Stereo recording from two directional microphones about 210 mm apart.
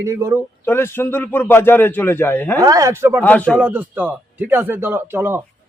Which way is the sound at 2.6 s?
15° right (ahead or behind).